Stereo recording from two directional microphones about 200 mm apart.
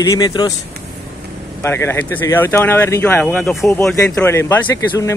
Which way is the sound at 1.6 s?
15° left (ahead or behind).